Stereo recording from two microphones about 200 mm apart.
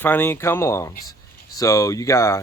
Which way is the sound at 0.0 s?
10° left (ahead or behind).